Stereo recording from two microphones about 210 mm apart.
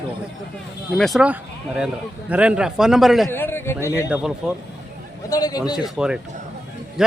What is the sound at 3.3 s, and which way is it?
Speech, 10° left (ahead or behind).